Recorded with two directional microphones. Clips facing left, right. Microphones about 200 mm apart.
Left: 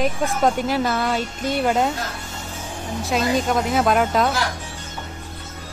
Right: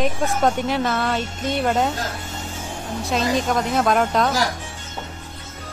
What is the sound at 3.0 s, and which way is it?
Speech, centre (ahead or behind).